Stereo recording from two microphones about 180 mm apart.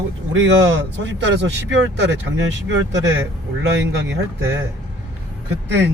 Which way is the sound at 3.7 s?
90° right.